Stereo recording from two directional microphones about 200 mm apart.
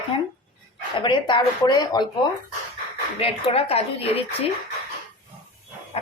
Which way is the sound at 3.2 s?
30° left (ahead or behind).